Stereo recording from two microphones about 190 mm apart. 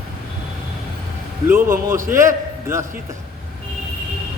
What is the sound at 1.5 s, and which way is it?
A man's voice, 15° right (ahead or behind).